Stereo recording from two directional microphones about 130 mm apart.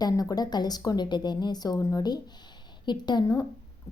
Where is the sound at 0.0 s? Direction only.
30° left (ahead or behind).